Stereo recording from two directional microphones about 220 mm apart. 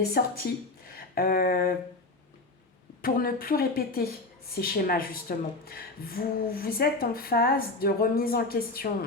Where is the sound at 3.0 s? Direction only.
40° left (ahead or behind).